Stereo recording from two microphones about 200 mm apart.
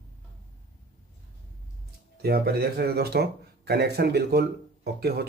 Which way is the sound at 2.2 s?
50° right (ahead or behind).